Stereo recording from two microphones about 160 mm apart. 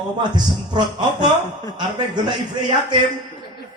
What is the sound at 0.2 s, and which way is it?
Speech, 25° right (ahead or behind).